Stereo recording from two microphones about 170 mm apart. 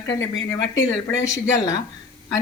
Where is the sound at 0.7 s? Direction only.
90° left.